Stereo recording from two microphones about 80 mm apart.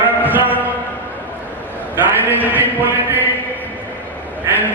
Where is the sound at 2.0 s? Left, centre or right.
Right.